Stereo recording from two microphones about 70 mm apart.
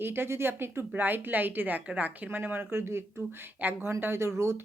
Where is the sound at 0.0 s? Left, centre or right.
Right.